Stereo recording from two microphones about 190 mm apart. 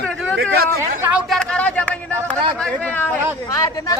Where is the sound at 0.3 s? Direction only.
55° right (ahead or behind).